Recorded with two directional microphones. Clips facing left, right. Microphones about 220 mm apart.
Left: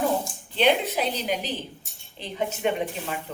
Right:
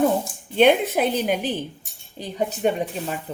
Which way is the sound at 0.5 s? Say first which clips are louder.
Right 6 dB; 50° right (ahead or behind).